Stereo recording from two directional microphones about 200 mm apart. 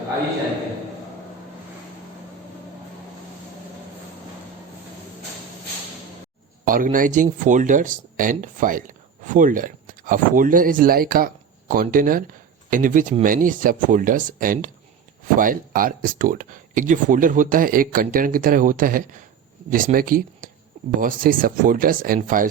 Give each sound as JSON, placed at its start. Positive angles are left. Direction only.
{"t": 6.7, "sound": "speech", "side_deg": -45}